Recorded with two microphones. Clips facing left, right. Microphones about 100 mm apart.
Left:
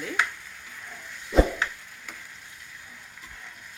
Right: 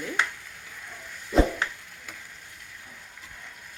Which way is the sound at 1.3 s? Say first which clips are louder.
Left 1 dB; centre (ahead or behind).